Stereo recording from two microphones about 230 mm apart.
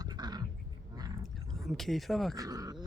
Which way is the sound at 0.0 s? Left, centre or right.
Centre.